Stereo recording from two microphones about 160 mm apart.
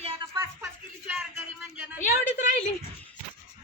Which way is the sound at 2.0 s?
55° left (ahead or behind).